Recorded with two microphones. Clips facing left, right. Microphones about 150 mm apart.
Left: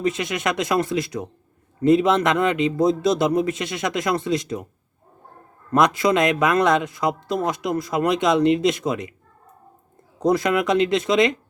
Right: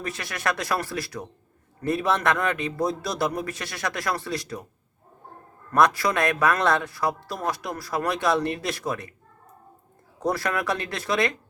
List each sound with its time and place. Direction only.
0.0 s speech: 20° left (ahead or behind)
5.7 s speech: 20° left (ahead or behind)
10.2 s speech: 20° left (ahead or behind)